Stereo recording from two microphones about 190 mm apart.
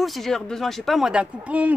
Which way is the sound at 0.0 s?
Centre (ahead or behind).